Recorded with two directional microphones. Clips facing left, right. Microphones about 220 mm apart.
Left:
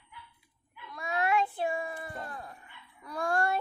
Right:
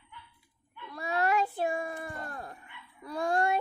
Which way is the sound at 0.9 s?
35° right (ahead or behind).